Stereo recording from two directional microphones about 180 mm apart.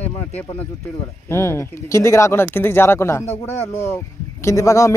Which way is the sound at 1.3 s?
15° left (ahead or behind).